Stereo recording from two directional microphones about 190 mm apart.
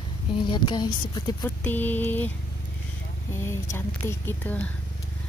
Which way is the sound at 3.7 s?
10° left (ahead or behind).